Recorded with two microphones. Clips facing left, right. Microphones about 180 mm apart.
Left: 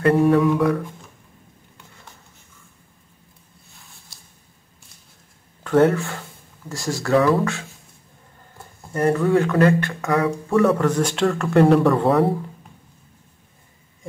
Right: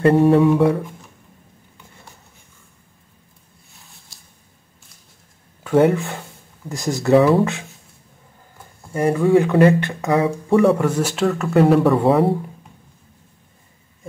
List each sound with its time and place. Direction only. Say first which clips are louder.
0.0 s speech: right 3 dB; 25° right (ahead or behind)
5.6 s speech: right 1 dB; 10° right (ahead or behind)
8.9 s speech: right 3 dB; 10° right (ahead or behind); by 10.8 s 25° right (ahead or behind)
10.8 s speech: even; 5° right (ahead or behind)